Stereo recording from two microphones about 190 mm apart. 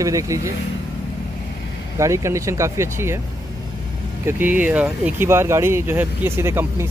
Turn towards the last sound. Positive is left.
turn(degrees=-15)  # may be behind; listen again after turning